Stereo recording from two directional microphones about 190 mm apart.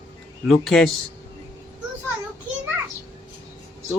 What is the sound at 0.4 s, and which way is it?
Speech, centre (ahead or behind).